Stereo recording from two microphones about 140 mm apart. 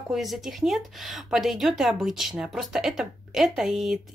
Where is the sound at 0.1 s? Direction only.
Centre (ahead or behind).